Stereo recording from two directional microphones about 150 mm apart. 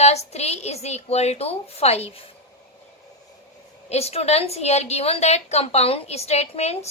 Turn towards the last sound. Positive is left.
turn(degrees=45)  # may be behind; listen again after turning